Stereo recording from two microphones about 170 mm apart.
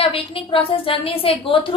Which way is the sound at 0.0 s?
30° left (ahead or behind).